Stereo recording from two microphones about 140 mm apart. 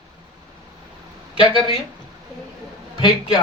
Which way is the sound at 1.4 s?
40° left (ahead or behind).